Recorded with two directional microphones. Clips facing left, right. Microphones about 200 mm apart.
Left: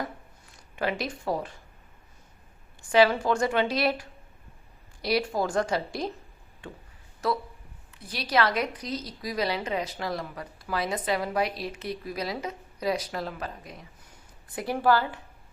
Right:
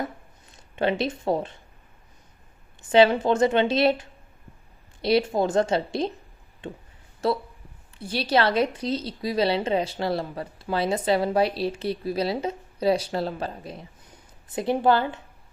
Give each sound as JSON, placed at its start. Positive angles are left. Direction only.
{"t": 0.0, "sound": "a sound", "side_deg": -25}
{"t": 2.9, "sound": "a woman's voice", "side_deg": -25}
{"t": 5.0, "sound": "a woman's voice", "side_deg": -25}